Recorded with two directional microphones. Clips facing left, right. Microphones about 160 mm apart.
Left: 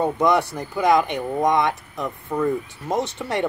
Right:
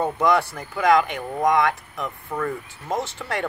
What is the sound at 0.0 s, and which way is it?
Speech, 20° left (ahead or behind).